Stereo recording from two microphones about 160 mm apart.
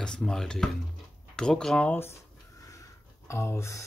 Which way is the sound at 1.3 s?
5° left (ahead or behind).